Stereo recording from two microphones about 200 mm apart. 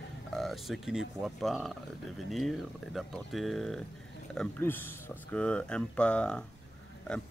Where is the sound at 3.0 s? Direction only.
Centre (ahead or behind).